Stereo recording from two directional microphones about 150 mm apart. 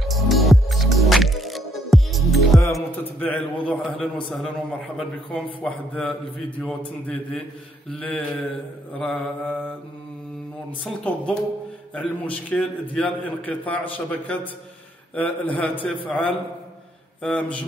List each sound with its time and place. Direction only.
0.0 s music: centre (ahead or behind)
3.0 s a man's voice: 10° left (ahead or behind)
10.8 s a man's voice: 10° left (ahead or behind)